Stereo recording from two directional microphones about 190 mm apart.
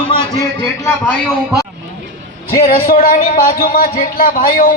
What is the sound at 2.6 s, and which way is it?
Speech, 50° left (ahead or behind).